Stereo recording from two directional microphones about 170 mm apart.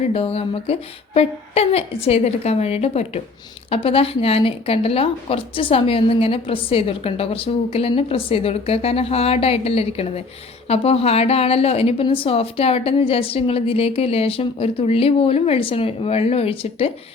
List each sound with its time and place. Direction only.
0.1 s speech: 35° left (ahead or behind)